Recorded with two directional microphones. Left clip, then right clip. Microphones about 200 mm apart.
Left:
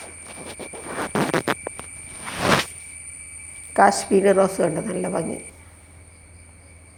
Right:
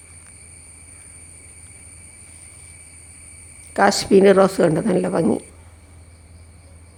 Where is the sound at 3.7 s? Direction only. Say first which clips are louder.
Right 2 dB; 10° right (ahead or behind).